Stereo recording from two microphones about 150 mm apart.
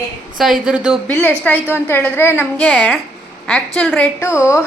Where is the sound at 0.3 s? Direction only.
Centre (ahead or behind).